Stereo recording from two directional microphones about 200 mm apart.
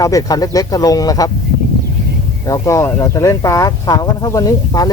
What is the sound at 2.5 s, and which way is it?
Speech, 15° left (ahead or behind).